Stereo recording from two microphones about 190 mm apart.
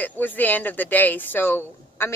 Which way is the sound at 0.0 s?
10° left (ahead or behind).